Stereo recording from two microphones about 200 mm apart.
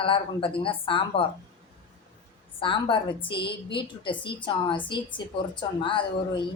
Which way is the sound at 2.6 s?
25° left (ahead or behind).